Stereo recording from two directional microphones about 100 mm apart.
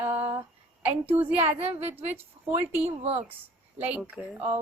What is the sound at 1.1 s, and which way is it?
Speech, 20° right (ahead or behind).